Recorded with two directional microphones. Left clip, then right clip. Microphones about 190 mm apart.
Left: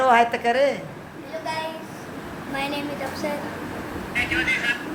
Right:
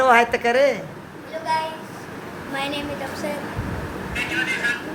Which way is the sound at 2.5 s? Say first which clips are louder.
Right 1 dB; 5° right (ahead or behind).